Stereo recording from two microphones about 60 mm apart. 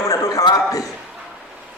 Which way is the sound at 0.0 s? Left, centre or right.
Left.